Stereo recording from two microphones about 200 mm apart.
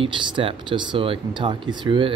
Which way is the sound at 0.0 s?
25° right (ahead or behind).